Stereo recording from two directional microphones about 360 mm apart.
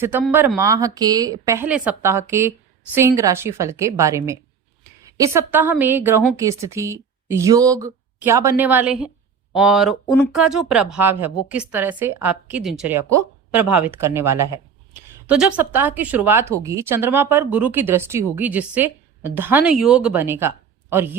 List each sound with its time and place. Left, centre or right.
0.0 s a woman's voice: centre